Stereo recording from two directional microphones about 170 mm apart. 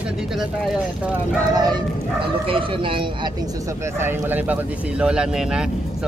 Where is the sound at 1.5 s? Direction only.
25° right (ahead or behind).